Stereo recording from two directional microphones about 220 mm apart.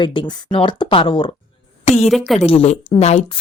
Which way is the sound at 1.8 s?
30° left (ahead or behind).